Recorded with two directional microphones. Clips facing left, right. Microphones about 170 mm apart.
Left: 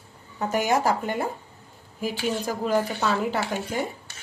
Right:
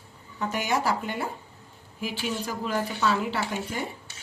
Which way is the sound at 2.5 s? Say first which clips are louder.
Left 7 dB; 40° left (ahead or behind).